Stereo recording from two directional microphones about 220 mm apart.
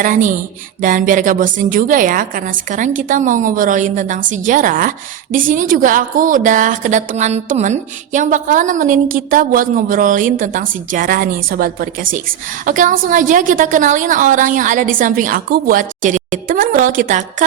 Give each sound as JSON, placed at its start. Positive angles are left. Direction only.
{"t": 0.0, "sound": "a woman's voice", "side_deg": -35}